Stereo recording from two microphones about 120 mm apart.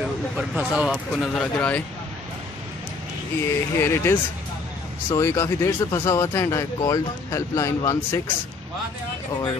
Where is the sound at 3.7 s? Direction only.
20° left (ahead or behind).